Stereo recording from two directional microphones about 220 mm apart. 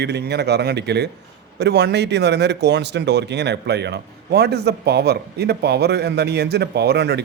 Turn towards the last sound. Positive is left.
turn(degrees=-50)  # may be behind; listen again after turning